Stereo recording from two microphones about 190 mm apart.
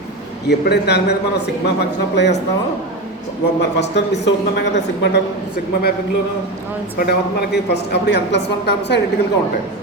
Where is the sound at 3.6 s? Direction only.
65° left (ahead or behind).